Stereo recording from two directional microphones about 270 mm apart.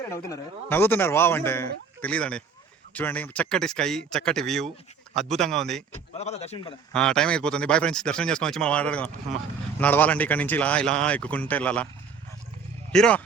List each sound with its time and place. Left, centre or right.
0.0 s a man's voice: centre
6.1 s a man's voice: left
6.9 s a man's voice: centre
12.9 s a man's voice: centre